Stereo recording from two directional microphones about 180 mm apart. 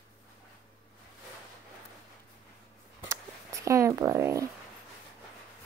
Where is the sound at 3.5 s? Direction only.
15° right (ahead or behind).